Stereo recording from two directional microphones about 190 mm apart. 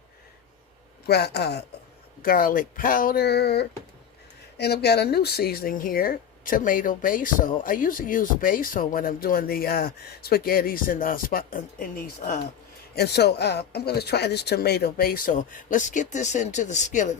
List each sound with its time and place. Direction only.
1.0 s speech: 60° left (ahead or behind)
2.2 s speech: 50° left (ahead or behind)